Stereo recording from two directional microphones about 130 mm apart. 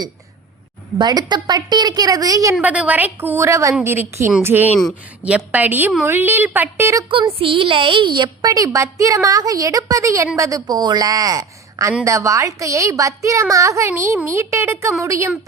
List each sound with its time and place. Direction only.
0.9 s a woman's voice: 35° right (ahead or behind)
2.6 s a woman's voice: 10° right (ahead or behind)
7.3 s a woman's voice: 45° right (ahead or behind); by 15.3 s 25° right (ahead or behind)